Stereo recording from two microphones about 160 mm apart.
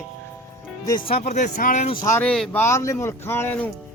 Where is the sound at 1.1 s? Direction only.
50° left (ahead or behind).